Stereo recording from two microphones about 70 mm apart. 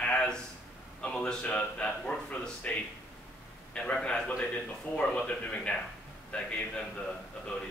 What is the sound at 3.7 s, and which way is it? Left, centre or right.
Speech, centre.